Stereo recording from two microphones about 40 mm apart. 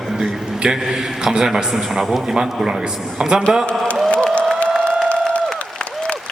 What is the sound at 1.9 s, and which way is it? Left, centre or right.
Speech, centre.